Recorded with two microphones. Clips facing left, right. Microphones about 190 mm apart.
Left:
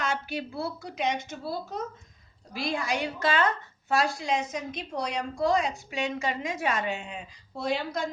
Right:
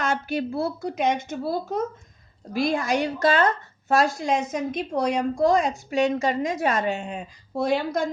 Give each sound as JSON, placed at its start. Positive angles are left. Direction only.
{"t": 0.0, "sound": "a woman's voice", "side_deg": -45}